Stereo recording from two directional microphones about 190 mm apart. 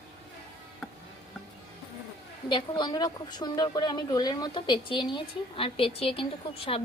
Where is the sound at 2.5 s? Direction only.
25° left (ahead or behind).